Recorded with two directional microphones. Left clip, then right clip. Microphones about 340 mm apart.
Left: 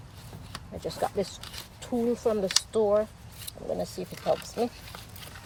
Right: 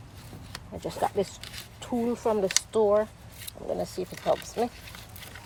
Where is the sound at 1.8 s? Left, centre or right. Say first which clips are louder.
Left 1 dB; centre.